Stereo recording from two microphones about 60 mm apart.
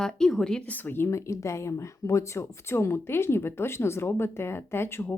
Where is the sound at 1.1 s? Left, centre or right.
Left.